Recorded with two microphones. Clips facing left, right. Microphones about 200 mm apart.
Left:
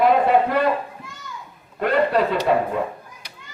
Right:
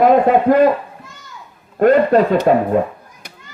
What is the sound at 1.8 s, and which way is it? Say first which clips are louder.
Speech: right 8 dB; 45° right (ahead or behind).